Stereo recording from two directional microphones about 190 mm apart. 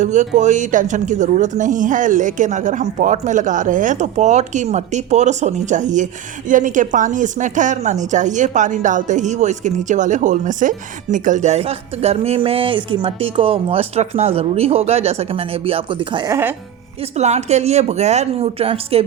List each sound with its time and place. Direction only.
0.0 s a woman's voice: 40° right (ahead or behind); by 16.6 s 15° right (ahead or behind)
17.2 s a woman's voice: 35° right (ahead or behind)